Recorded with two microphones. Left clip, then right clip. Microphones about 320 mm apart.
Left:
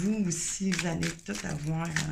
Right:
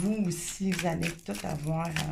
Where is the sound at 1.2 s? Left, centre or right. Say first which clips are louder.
Right 1 dB; centre.